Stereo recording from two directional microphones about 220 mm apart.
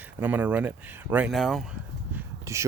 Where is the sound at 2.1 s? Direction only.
15° right (ahead or behind).